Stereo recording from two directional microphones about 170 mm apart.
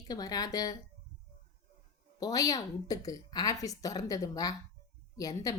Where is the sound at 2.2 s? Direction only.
20° left (ahead or behind).